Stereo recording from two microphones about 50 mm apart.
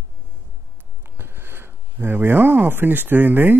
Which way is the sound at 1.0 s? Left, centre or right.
Right.